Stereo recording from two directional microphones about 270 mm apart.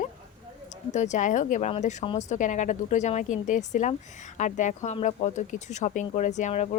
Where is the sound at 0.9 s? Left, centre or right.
Left.